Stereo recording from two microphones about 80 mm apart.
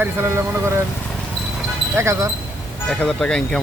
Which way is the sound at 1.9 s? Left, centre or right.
Right.